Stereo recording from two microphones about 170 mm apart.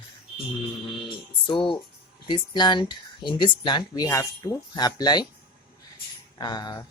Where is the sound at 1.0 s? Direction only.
30° left (ahead or behind).